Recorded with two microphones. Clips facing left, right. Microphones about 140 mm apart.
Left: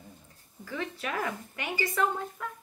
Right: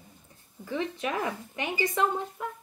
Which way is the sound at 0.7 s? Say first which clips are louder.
Right 4 dB; 20° right (ahead or behind).